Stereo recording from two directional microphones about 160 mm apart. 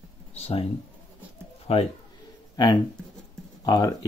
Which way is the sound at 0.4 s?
40° left (ahead or behind).